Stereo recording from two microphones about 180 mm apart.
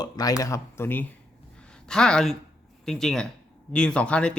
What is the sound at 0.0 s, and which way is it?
Speech, 20° left (ahead or behind).